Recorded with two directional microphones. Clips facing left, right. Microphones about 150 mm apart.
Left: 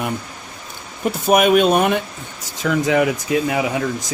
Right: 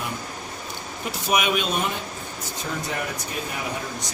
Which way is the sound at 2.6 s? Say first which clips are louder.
Left 13 dB; 90° left.